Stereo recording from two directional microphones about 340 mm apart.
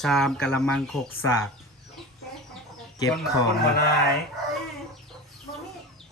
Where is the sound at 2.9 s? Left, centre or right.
Centre.